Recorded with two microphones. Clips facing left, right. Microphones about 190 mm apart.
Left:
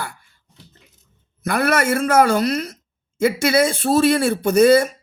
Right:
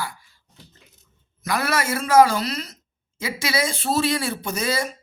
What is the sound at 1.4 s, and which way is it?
Speech, 55° left (ahead or behind).